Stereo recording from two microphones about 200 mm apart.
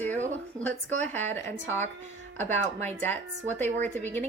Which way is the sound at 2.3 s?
35° right (ahead or behind).